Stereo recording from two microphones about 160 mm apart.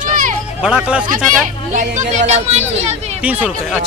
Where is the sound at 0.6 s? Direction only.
5° right (ahead or behind).